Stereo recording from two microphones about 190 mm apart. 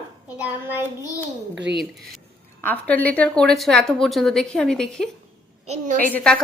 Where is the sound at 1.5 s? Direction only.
70° right (ahead or behind).